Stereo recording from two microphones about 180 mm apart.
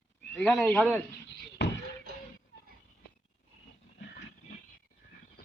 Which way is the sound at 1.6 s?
70° left (ahead or behind).